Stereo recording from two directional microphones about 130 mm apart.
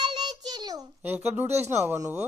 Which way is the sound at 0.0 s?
35° right (ahead or behind).